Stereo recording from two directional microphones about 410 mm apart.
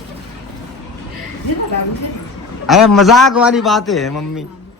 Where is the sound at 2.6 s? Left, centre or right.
Centre.